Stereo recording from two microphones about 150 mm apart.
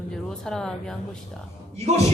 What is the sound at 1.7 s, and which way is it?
Speech, 45° right (ahead or behind).